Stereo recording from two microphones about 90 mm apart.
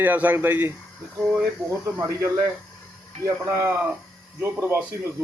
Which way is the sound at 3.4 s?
35° right (ahead or behind).